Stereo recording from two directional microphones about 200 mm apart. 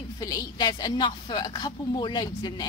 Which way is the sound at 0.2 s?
20° left (ahead or behind).